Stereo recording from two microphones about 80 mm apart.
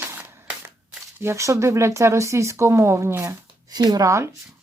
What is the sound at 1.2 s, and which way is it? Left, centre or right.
Speech, right.